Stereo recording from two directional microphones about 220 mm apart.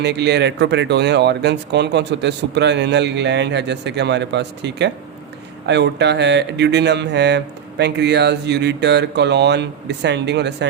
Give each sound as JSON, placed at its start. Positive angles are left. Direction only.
{"t": 0.0, "sound": "speech", "side_deg": -50}